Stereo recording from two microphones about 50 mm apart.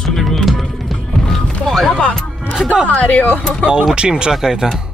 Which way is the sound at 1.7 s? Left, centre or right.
Centre.